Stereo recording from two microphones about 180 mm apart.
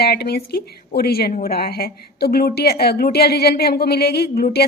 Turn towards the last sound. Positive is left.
turn(degrees=60)  # may be behind; listen again after turning